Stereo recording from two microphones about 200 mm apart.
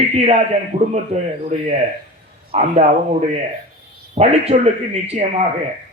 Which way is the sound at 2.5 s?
30° right (ahead or behind).